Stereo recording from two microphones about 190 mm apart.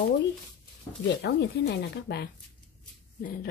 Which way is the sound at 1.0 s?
60° left (ahead or behind).